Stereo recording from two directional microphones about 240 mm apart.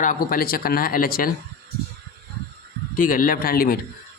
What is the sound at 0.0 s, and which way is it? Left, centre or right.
Speech, left.